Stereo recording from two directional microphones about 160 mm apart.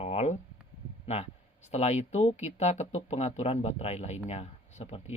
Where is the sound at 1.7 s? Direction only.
40° left (ahead or behind).